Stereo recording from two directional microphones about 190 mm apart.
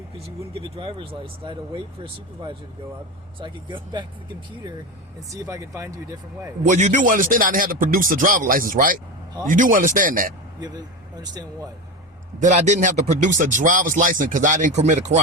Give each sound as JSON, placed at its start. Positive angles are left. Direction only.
{"t": 0.5, "sound": "speech", "side_deg": -25}
{"t": 3.3, "sound": "speech", "side_deg": -25}
{"t": 5.3, "sound": "speech", "side_deg": -15}
{"t": 6.7, "sound": "speech", "side_deg": -40}
{"t": 12.4, "sound": "speech", "side_deg": -40}